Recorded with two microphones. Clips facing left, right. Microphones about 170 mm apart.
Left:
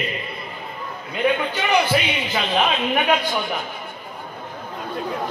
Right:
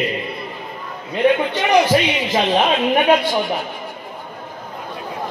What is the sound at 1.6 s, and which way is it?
A woman's voice, 35° right (ahead or behind).